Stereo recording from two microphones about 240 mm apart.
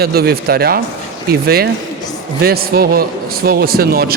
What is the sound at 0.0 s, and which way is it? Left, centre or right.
Speech, right.